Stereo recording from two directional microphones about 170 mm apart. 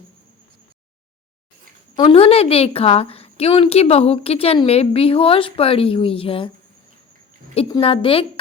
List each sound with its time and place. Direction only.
2.0 s a woman's voice: 35° left (ahead or behind)
7.7 s a woman's voice: 30° left (ahead or behind)